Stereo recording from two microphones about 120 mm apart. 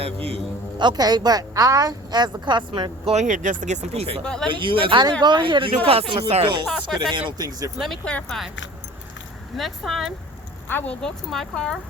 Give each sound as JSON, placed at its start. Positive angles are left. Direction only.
{"t": 0.0, "sound": "a man's voice", "side_deg": -55}
{"t": 0.8, "sound": "a woman's voice", "side_deg": -35}
{"t": 3.1, "sound": "speech", "side_deg": -80}
{"t": 4.2, "sound": "speech", "side_deg": 5}
{"t": 4.5, "sound": "a woman's voice", "side_deg": -45}
{"t": 7.8, "sound": "speech", "side_deg": 5}
{"t": 9.6, "sound": "speech", "side_deg": 0}
{"t": 10.7, "sound": "speech", "side_deg": 15}
{"t": 11.0, "sound": "speech", "side_deg": 5}